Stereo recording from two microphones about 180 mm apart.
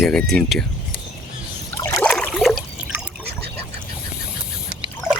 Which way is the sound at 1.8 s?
15° left (ahead or behind).